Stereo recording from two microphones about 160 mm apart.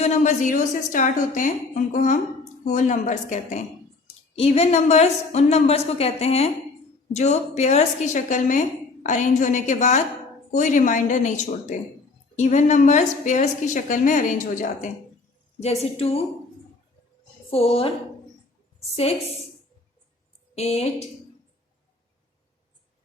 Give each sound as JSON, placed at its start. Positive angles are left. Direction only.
{"t": 0.0, "sound": "a woman's voice", "side_deg": 45}
{"t": 4.4, "sound": "a woman's voice", "side_deg": 40}
{"t": 15.6, "sound": "a woman's voice", "side_deg": 40}
{"t": 17.5, "sound": "a woman's voice", "side_deg": 35}
{"t": 20.6, "sound": "a woman's voice", "side_deg": 40}